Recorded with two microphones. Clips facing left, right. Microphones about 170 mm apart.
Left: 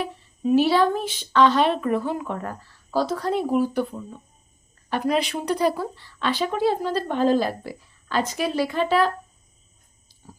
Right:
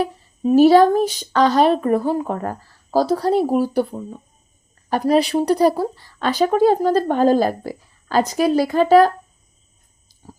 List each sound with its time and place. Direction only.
0.0 s speech: 40° right (ahead or behind)